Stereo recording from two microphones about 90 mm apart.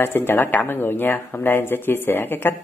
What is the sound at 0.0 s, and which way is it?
Speech, 25° left (ahead or behind).